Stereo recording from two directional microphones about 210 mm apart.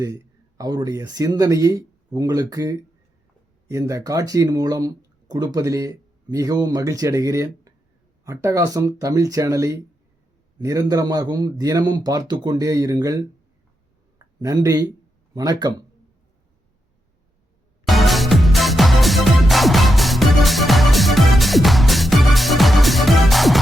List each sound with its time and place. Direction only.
0.0 s speech: 15° right (ahead or behind)
14.4 s speech: 15° right (ahead or behind)
17.8 s music: centre (ahead or behind)